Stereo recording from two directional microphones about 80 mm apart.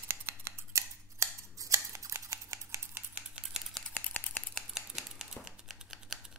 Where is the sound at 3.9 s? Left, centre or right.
Left.